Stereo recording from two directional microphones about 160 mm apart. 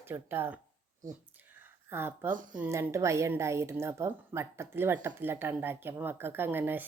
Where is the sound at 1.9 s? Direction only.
15° right (ahead or behind).